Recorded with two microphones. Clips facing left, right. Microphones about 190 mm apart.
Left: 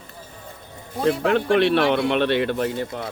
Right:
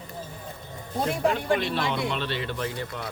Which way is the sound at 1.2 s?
70° left (ahead or behind).